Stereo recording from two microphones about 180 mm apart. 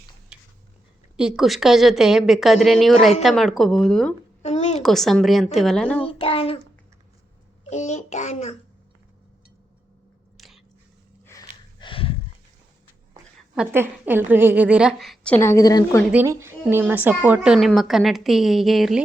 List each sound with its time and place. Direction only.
1.1 s a woman's voice: 5° right (ahead or behind)
4.4 s a sound: 40° left (ahead or behind)
4.8 s a woman's voice: centre (ahead or behind)
6.0 s child singing: 30° left (ahead or behind)
7.7 s child singing: 40° left (ahead or behind)
10.3 s biting: centre (ahead or behind)
11.3 s gasp: 20° left (ahead or behind)
13.6 s a woman's voice: 10° right (ahead or behind); by 16.0 s 20° left (ahead or behind)
16.1 s a woman's voice: 15° right (ahead or behind)